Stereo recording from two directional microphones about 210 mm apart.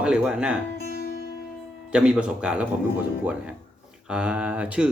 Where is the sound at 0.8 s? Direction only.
45° left (ahead or behind).